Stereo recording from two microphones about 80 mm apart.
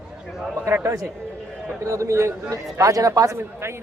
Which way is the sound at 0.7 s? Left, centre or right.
Right.